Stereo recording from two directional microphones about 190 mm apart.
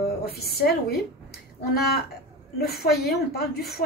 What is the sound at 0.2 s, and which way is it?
Speech, 55° left (ahead or behind).